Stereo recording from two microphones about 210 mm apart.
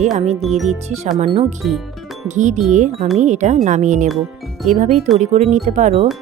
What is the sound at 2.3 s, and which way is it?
Speech, 35° right (ahead or behind).